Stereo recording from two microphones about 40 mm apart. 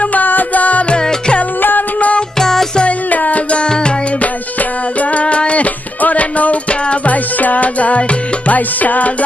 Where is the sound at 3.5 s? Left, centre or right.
Left.